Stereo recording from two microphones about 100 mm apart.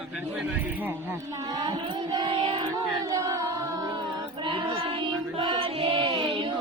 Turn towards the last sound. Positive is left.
turn(degrees=-60)  # may be behind; listen again after turning